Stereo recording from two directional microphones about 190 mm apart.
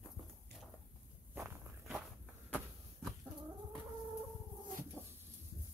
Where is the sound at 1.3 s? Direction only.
10° right (ahead or behind).